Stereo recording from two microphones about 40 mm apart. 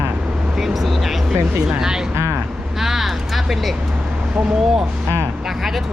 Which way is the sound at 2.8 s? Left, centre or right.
Centre.